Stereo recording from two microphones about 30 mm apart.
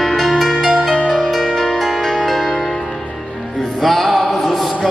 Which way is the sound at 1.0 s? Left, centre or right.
Right.